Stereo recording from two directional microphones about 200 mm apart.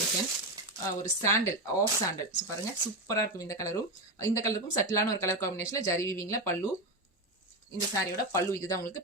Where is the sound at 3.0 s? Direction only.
15° left (ahead or behind).